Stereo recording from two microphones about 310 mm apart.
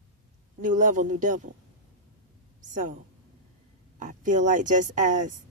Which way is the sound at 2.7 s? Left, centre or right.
Right.